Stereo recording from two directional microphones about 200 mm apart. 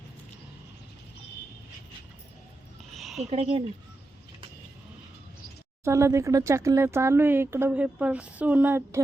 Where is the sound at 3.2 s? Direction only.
30° right (ahead or behind).